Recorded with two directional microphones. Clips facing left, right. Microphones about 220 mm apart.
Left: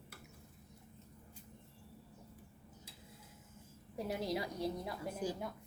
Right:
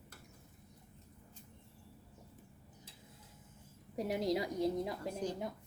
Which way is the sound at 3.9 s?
20° right (ahead or behind).